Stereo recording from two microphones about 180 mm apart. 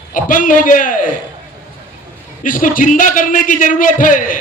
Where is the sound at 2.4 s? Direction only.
50° left (ahead or behind).